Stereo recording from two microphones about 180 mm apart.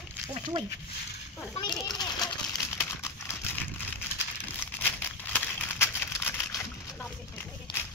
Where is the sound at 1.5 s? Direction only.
25° left (ahead or behind).